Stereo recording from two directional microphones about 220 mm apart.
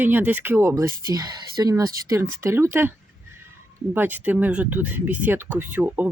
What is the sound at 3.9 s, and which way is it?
Speech, 10° right (ahead or behind).